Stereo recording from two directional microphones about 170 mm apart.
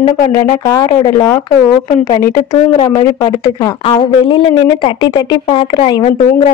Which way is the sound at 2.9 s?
20° left (ahead or behind).